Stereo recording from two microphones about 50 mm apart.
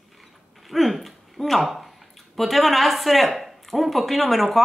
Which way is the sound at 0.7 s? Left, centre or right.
Centre.